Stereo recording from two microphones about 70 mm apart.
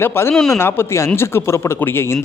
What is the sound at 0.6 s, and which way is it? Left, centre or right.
Speech, left.